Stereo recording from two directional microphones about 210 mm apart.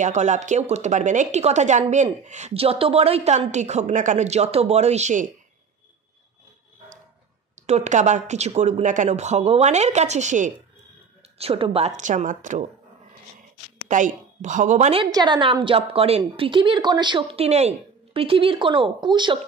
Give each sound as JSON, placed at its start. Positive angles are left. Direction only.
{"t": 0.0, "sound": "speech", "side_deg": -35}
{"t": 7.5, "sound": "speech", "side_deg": -35}
{"t": 13.8, "sound": "a woman's voice", "side_deg": -35}
{"t": 15.0, "sound": "a woman's voice", "side_deg": -20}